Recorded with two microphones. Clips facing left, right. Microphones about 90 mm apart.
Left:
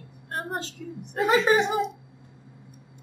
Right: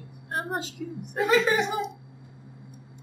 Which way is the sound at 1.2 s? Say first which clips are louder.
Left 2 dB; 25° left (ahead or behind).